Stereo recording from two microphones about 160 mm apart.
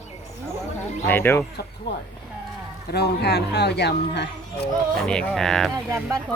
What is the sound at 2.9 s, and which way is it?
Speech, 90° left.